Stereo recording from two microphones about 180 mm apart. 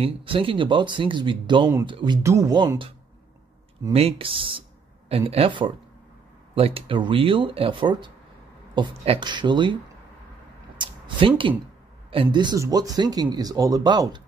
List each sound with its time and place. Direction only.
0.0 s speech: 30° right (ahead or behind)
3.9 s speech: 30° right (ahead or behind)
10.8 s a sound: 25° right (ahead or behind)
12.1 s speech: 30° right (ahead or behind)